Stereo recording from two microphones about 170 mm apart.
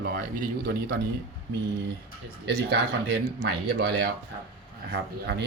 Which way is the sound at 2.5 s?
85° right.